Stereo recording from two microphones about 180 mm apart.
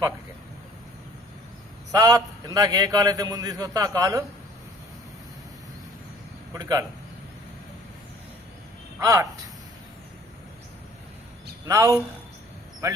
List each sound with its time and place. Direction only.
1.9 s a man's voice: 20° right (ahead or behind)
6.5 s a man's voice: 20° right (ahead or behind)
9.0 s speech: 20° right (ahead or behind)
11.6 s a man's voice: 20° right (ahead or behind)